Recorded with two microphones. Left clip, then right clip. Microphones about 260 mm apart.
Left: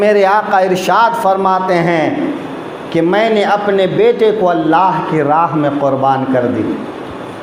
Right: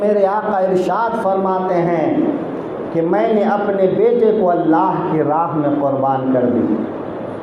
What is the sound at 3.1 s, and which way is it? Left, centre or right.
Speech, left.